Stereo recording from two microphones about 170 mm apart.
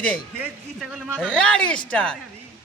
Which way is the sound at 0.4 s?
5° right (ahead or behind).